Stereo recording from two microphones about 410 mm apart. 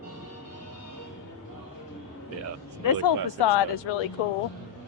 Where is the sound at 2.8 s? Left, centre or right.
Left.